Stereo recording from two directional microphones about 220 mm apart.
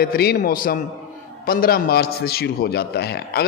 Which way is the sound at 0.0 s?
45° left (ahead or behind).